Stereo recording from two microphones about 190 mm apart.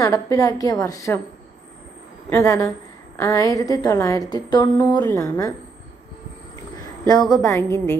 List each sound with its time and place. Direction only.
0.0 s a woman's voice: 15° left (ahead or behind)
2.2 s a woman's voice: 15° left (ahead or behind)
7.1 s a woman's voice: 20° left (ahead or behind)